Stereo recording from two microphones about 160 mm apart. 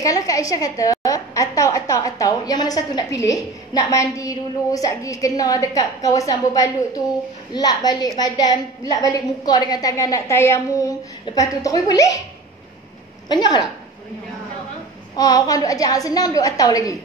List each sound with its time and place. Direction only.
0.0 s a woman's voice: 20° left (ahead or behind)
13.3 s a woman's voice: 25° left (ahead or behind)
15.1 s a woman's voice: 25° left (ahead or behind)